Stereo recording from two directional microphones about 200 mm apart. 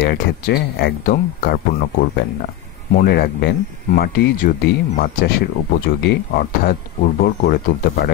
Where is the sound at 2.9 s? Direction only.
50° left (ahead or behind).